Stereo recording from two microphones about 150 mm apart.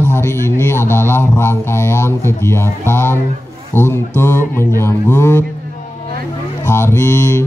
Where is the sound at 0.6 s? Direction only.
15° left (ahead or behind).